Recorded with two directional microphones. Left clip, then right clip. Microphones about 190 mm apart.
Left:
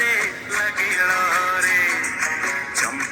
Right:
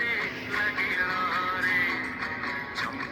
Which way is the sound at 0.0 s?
50° left (ahead or behind).